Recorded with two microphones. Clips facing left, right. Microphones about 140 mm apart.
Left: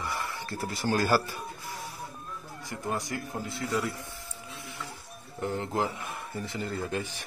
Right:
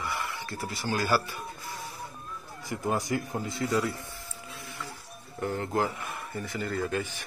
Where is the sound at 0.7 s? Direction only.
45° left (ahead or behind).